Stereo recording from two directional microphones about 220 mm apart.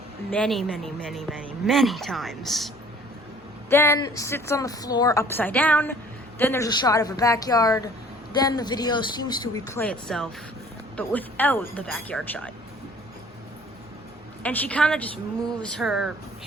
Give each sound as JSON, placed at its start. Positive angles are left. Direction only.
{"t": 0.3, "sound": "speech", "side_deg": 5}
{"t": 3.7, "sound": "a woman's voice", "side_deg": 10}
{"t": 14.4, "sound": "a woman's voice", "side_deg": 5}